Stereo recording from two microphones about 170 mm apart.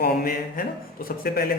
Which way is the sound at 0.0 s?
60° left (ahead or behind).